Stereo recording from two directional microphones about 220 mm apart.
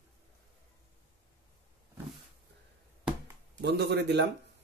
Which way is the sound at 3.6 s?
50° right (ahead or behind).